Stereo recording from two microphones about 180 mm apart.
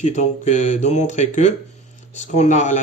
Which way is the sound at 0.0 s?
40° left (ahead or behind).